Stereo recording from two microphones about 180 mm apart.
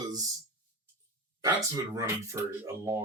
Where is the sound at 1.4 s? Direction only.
20° right (ahead or behind).